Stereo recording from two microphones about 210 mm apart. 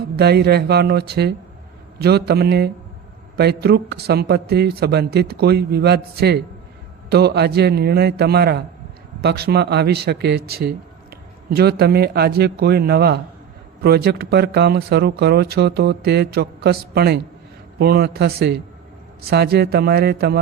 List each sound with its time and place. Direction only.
0.2 s speech: 50° right (ahead or behind)